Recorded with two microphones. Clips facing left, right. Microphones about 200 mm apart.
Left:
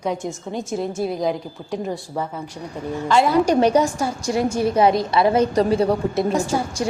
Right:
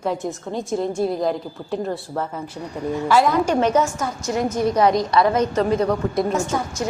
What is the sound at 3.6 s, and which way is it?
A woman's voice, 35° left (ahead or behind).